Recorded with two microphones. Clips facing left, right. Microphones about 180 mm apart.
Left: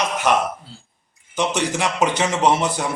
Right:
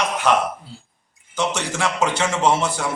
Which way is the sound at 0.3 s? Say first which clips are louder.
Right 1 dB; 15° left (ahead or behind).